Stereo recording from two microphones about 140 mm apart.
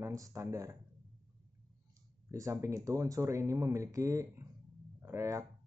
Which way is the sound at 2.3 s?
20° right (ahead or behind).